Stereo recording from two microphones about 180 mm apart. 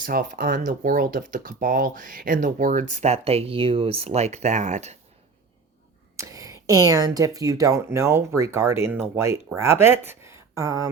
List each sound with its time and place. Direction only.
0.0 s speech: 50° right (ahead or behind)
6.1 s speech: 20° right (ahead or behind)